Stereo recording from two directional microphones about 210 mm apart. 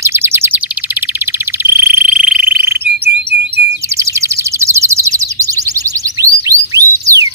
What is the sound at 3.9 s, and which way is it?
Bird, 15° right (ahead or behind).